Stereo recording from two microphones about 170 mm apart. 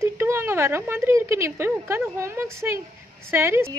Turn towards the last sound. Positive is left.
turn(degrees=-15)  # may be behind; listen again after turning